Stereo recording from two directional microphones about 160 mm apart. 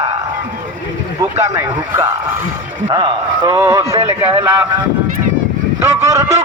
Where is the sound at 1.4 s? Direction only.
15° right (ahead or behind).